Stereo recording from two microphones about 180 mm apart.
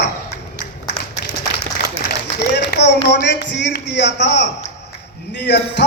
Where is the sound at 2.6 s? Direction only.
75° left (ahead or behind).